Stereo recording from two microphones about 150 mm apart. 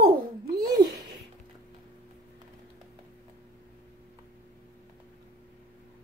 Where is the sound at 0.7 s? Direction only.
25° right (ahead or behind).